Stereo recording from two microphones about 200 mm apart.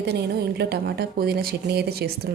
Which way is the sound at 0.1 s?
55° right (ahead or behind).